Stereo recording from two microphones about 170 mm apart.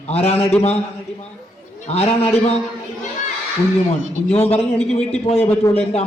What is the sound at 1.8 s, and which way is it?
Speech, 35° left (ahead or behind).